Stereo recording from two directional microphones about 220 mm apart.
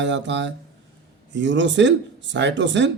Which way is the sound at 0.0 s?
55° right (ahead or behind).